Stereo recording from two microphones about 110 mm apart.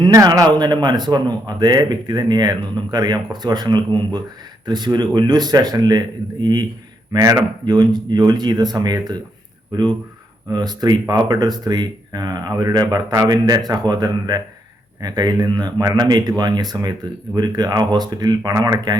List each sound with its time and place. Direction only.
0.3 s a man's voice: 40° right (ahead or behind)
10.5 s a man's voice: 35° right (ahead or behind)